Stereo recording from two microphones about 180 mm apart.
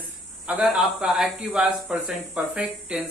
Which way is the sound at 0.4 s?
5° right (ahead or behind).